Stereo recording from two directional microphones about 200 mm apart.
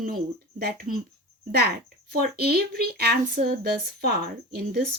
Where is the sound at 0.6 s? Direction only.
50° right (ahead or behind).